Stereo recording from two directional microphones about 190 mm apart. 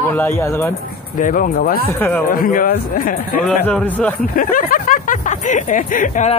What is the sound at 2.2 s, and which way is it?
Speech, 45° left (ahead or behind).